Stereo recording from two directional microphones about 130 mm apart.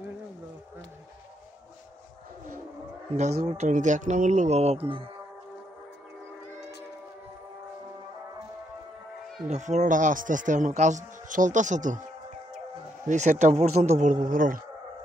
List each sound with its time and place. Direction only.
3.2 s speech: 60° right (ahead or behind)
9.5 s speech: 65° right (ahead or behind)
13.0 s speech: 65° right (ahead or behind); by 14.6 s 90° right